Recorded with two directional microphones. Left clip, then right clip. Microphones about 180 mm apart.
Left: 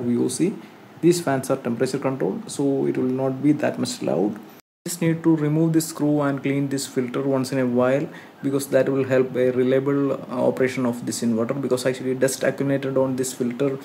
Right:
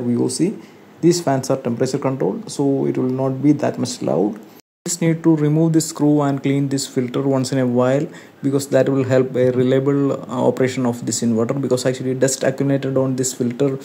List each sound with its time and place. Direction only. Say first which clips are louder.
0.4 s speech: right 3 dB; 10° right (ahead or behind)